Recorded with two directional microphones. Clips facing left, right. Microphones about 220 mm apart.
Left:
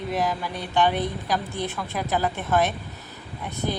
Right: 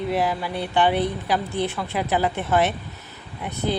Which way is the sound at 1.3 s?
15° right (ahead or behind).